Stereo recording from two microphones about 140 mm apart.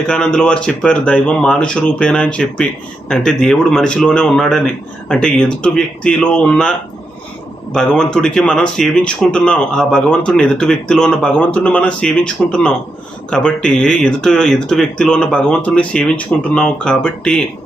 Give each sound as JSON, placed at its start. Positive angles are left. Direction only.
{"t": 0.1, "sound": "speech", "side_deg": 5}